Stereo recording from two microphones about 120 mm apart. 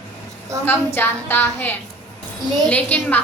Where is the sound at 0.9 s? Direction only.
15° left (ahead or behind).